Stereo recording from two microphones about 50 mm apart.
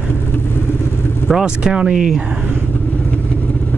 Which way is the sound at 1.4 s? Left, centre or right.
Centre.